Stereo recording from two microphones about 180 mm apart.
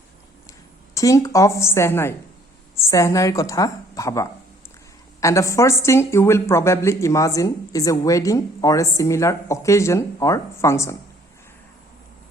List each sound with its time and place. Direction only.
0.9 s a woman's voice: 20° left (ahead or behind)